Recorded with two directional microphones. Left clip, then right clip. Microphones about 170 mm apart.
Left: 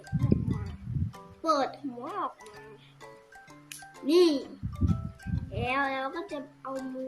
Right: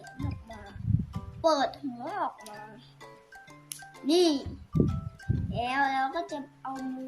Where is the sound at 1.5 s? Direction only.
30° right (ahead or behind).